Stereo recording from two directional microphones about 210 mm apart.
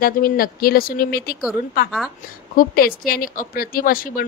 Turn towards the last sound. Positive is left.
turn(degrees=45)  # may be behind; listen again after turning